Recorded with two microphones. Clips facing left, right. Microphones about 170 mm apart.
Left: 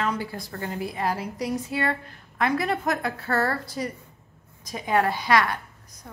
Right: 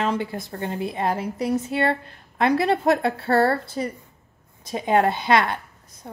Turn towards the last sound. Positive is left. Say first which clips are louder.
# right 2 dB
turn(degrees=-25)  # may be behind; listen again after turning